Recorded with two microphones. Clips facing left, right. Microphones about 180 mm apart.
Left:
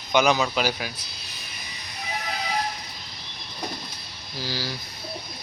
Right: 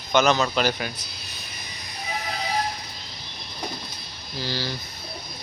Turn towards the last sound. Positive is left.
turn(degrees=5)  # may be behind; listen again after turning